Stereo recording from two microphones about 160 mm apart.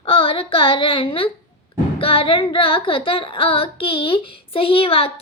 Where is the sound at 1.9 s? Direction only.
35° left (ahead or behind).